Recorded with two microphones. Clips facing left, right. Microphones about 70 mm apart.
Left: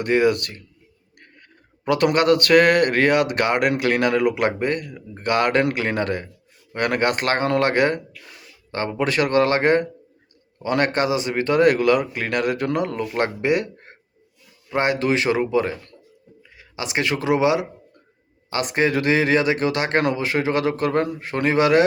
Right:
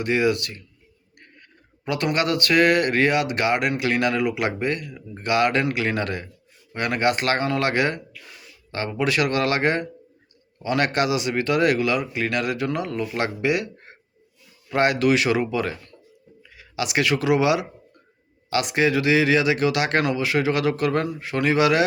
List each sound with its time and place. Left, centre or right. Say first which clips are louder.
0.0 s speech: left 3 dB; left
1.8 s speech: left 5 dB; left
6.7 s speech: left 1 dB; left
14.7 s speech: right 1 dB; left